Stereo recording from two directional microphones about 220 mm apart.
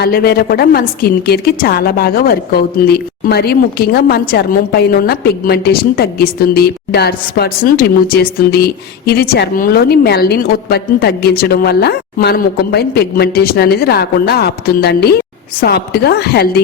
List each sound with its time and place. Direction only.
0.0 s a woman's voice: 45° left (ahead or behind)